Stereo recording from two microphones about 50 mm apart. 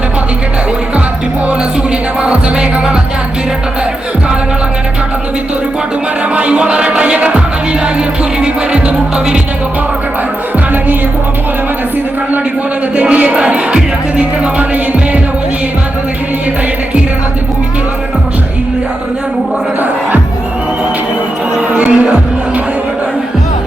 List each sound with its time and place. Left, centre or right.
2.2 s music: right
6.3 s music: right
13.0 s music: right
21.8 s music: right